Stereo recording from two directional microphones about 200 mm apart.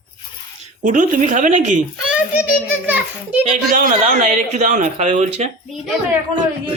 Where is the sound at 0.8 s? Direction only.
40° right (ahead or behind).